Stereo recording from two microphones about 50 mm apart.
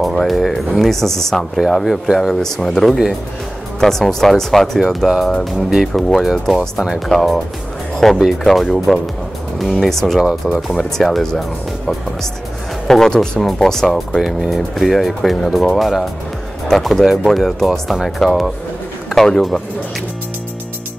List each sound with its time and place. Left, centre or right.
0.0 s speech: centre
14.2 s speech: centre